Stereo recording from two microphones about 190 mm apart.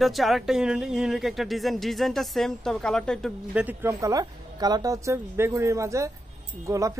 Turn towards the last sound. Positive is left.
turn(degrees=-15)  # may be behind; listen again after turning